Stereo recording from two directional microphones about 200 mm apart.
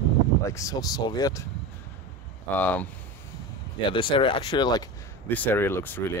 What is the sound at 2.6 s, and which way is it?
Speech, 10° left (ahead or behind).